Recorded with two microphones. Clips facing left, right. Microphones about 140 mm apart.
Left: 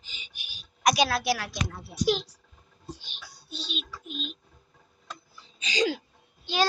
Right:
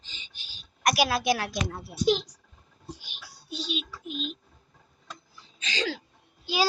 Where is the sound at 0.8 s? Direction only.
5° right (ahead or behind).